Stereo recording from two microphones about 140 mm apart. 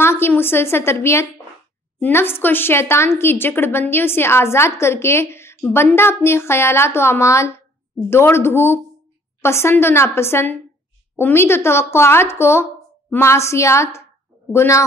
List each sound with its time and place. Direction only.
0.0 s a woman's voice: 15° left (ahead or behind)